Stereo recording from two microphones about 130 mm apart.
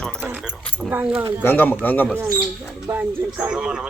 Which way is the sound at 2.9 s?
30° right (ahead or behind).